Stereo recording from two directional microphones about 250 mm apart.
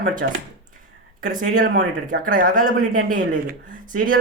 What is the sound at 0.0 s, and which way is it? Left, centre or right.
Speech, right.